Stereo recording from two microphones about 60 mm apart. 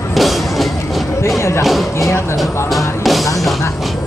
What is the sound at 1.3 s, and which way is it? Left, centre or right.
Music, left.